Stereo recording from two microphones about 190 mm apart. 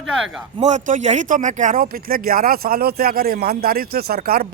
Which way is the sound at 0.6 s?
40° right (ahead or behind).